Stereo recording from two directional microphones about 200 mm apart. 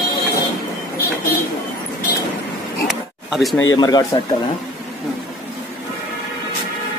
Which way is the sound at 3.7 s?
20° left (ahead or behind).